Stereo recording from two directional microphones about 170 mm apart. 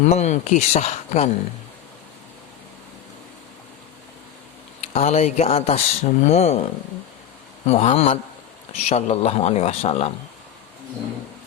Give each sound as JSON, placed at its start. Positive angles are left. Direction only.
{"t": 0.0, "sound": "speech", "side_deg": 40}
{"t": 4.8, "sound": "speech", "side_deg": 40}